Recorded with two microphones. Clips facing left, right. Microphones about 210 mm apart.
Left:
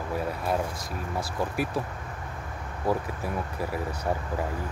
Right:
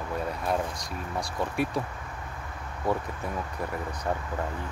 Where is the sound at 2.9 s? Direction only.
5° left (ahead or behind).